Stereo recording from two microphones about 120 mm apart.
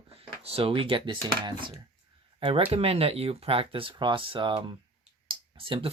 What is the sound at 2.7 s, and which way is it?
Speech, 55° right (ahead or behind).